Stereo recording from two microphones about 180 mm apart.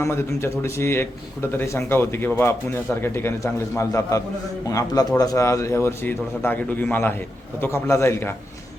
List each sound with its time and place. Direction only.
0.0 s speech: 15° left (ahead or behind)